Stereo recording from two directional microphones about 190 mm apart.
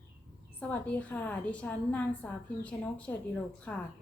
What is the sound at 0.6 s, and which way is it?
A woman's voice, 10° left (ahead or behind).